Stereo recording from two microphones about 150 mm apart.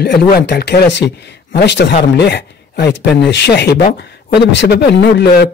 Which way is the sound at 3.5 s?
90° left.